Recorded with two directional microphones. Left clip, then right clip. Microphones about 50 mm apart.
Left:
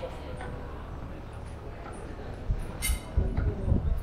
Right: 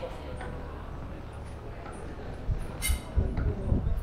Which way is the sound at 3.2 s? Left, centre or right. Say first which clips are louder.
Even; centre.